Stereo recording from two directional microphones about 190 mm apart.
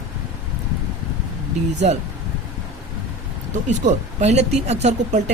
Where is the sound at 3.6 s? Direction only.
40° right (ahead or behind).